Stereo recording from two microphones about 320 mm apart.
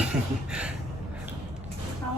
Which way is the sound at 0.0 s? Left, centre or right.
Centre.